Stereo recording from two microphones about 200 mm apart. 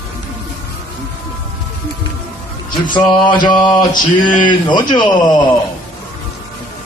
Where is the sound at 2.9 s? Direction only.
20° left (ahead or behind).